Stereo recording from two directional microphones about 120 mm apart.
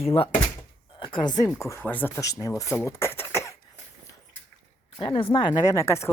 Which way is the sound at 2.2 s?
25° left (ahead or behind).